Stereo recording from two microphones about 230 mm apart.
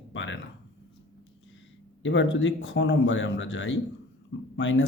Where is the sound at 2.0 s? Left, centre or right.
Left.